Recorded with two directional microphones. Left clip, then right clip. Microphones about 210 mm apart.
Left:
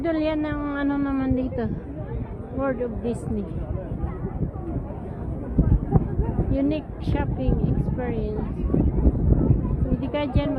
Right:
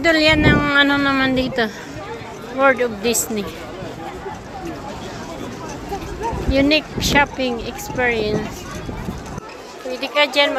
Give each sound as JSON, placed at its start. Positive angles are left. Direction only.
{"t": 0.0, "sound": "a woman's voice", "side_deg": -10}
{"t": 6.5, "sound": "a woman's voice", "side_deg": -15}
{"t": 10.0, "sound": "a woman's voice", "side_deg": -15}